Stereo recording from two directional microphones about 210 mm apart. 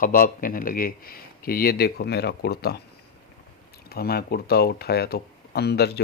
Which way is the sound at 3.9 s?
45° left (ahead or behind).